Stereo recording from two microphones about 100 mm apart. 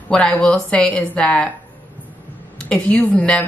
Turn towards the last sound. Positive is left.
turn(degrees=15)  # may be behind; listen again after turning